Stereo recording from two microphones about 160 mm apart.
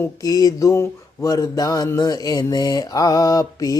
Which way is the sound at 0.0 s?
20° left (ahead or behind).